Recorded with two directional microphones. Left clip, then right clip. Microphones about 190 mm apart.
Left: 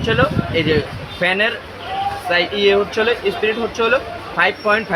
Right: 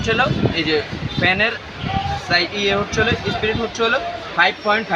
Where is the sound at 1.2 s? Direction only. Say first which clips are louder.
Left 1 dB; 30° left (ahead or behind).